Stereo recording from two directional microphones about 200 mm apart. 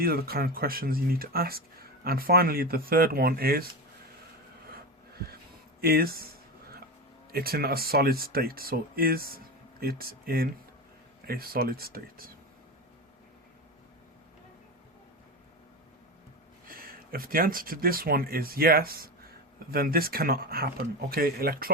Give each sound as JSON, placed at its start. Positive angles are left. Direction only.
{"t": 0.0, "sound": "speech", "side_deg": -50}
{"t": 4.6, "sound": "a sound", "side_deg": -50}
{"t": 5.8, "sound": "speech", "side_deg": -50}
{"t": 7.3, "sound": "speech", "side_deg": -50}
{"t": 16.6, "sound": "speech", "side_deg": -45}